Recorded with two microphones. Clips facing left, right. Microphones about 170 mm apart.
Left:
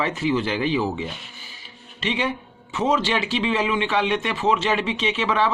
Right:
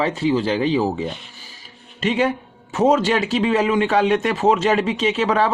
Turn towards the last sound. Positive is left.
turn(degrees=-40)  # may be behind; listen again after turning